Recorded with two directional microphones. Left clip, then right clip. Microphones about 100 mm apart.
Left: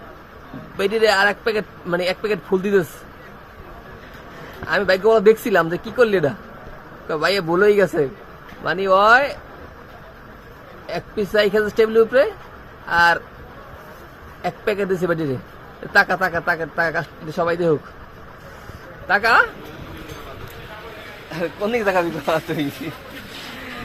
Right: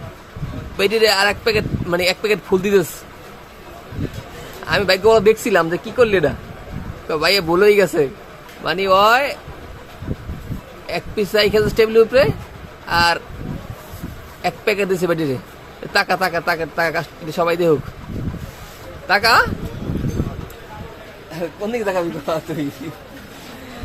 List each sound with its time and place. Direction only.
0.8 s speech: 10° right (ahead or behind)
4.6 s speech: 10° right (ahead or behind)
10.8 s speech: 5° right (ahead or behind)
14.4 s speech: 10° right (ahead or behind)
19.0 s speech: 5° right (ahead or behind)
21.2 s speech: 50° left (ahead or behind)